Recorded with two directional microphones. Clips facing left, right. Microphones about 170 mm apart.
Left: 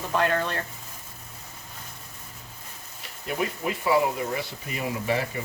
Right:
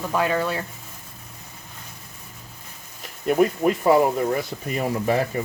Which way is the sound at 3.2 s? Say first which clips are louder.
Right 10 dB; 50° right (ahead or behind).